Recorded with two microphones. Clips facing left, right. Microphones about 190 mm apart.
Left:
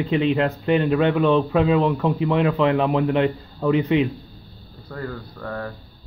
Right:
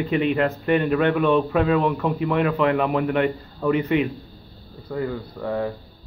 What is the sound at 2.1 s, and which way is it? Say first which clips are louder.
Speech: left 1 dB; 20° left (ahead or behind).